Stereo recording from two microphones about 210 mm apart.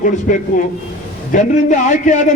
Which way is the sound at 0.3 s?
40° left (ahead or behind).